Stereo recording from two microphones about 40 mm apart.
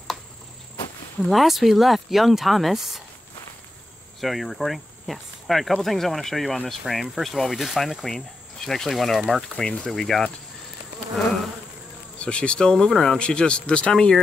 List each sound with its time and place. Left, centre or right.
1.3 s speech: centre
4.2 s speech: centre
9.6 s speech: centre
9.8 s speech: centre
12.2 s speech: left
12.7 s speech: centre
13.2 s speech: left